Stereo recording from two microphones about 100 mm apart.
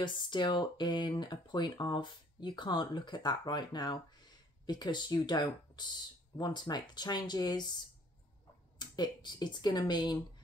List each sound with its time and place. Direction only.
0.0 s speech: 50° left (ahead or behind)
8.7 s speech: 45° left (ahead or behind)